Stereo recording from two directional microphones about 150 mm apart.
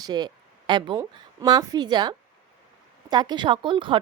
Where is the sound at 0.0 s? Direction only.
25° right (ahead or behind).